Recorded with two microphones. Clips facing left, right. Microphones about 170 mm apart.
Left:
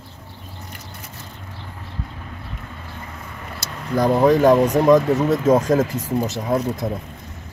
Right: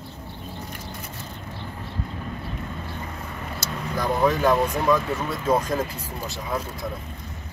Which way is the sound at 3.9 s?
35° left (ahead or behind).